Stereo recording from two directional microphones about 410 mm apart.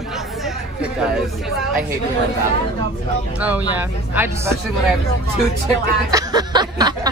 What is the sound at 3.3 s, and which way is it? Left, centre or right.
A woman's voice, centre.